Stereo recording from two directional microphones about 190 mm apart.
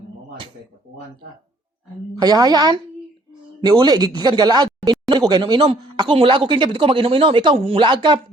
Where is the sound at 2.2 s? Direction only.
20° right (ahead or behind).